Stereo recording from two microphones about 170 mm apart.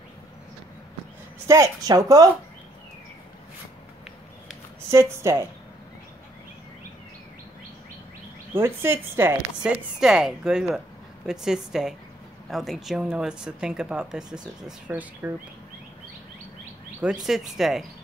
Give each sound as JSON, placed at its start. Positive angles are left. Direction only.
{"t": 1.5, "sound": "a woman's voice", "side_deg": -20}
{"t": 4.9, "sound": "a woman's voice", "side_deg": -15}
{"t": 8.5, "sound": "a woman's voice", "side_deg": -15}
{"t": 17.0, "sound": "a woman's voice", "side_deg": -5}